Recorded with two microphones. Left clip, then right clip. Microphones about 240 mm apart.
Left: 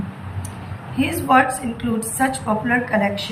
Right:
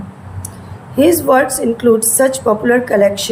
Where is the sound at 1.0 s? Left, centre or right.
Right.